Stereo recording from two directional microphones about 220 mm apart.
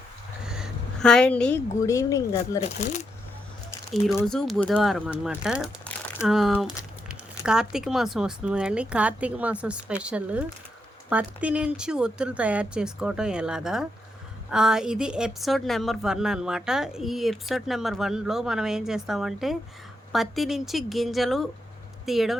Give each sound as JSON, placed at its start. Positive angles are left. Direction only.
{"t": 0.4, "sound": "a woman's voice", "side_deg": -5}
{"t": 2.7, "sound": "speech", "side_deg": 30}
{"t": 4.0, "sound": "a woman's voice", "side_deg": 0}